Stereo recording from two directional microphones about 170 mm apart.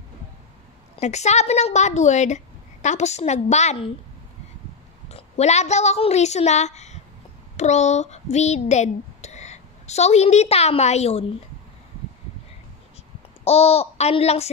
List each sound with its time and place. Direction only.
0.9 s a woman's voice: 40° left (ahead or behind)
5.0 s a woman's voice: 40° left (ahead or behind)
13.4 s a woman's voice: 35° left (ahead or behind)